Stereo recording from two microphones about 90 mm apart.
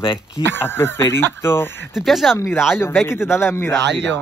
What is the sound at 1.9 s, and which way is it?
Speech, centre (ahead or behind).